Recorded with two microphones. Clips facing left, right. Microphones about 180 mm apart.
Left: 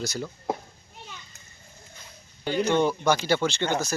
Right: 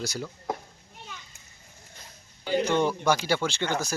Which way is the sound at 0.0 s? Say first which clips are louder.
Left 2 dB; 10° right (ahead or behind).